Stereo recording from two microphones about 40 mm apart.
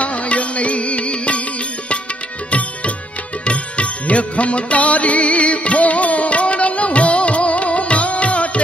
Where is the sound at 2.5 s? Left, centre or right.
Left.